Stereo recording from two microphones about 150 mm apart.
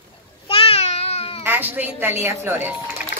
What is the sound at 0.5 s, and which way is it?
Babbling, 40° left (ahead or behind).